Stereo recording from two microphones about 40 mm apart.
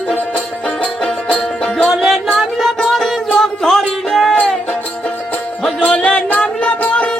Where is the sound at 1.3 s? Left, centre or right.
Left.